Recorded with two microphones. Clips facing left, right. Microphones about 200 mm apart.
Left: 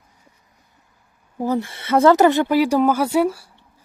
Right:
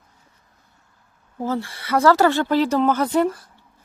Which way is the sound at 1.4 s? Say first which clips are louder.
Left 3 dB; 15° left (ahead or behind).